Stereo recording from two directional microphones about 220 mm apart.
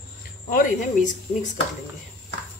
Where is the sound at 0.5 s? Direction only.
35° left (ahead or behind).